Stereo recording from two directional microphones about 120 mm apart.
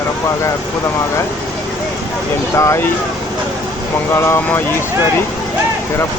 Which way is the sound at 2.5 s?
25° left (ahead or behind).